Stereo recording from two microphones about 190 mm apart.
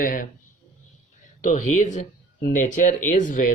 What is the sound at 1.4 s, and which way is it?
Speech, 40° left (ahead or behind).